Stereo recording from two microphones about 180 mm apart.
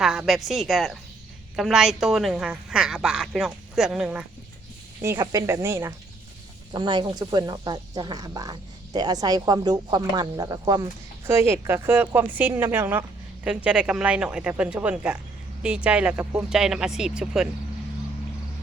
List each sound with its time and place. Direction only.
0.0 s a woman's voice: centre (ahead or behind)
5.0 s a woman's voice: 20° right (ahead or behind)